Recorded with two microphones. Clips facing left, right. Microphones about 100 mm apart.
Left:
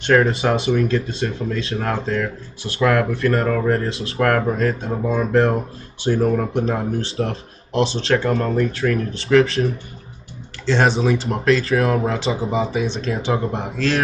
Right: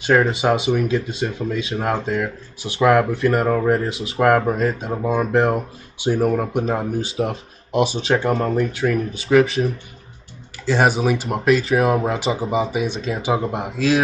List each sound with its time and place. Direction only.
0.0 s speech: 5° right (ahead or behind)